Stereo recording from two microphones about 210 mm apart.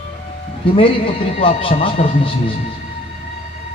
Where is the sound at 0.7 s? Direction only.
25° left (ahead or behind).